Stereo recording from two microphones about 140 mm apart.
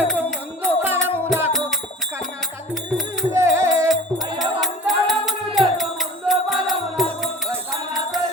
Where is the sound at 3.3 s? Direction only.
20° right (ahead or behind).